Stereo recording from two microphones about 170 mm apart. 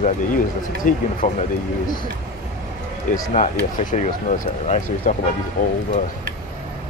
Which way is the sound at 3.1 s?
50° left (ahead or behind).